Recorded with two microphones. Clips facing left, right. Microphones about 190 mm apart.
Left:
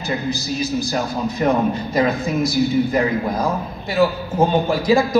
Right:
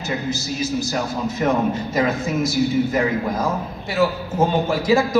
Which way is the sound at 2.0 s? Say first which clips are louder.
Left 2 dB; 35° left (ahead or behind).